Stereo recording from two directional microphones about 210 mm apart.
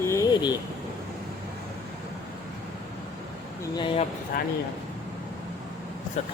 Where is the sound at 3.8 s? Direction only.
25° left (ahead or behind).